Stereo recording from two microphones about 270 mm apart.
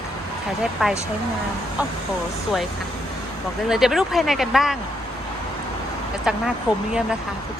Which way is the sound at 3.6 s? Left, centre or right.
Centre.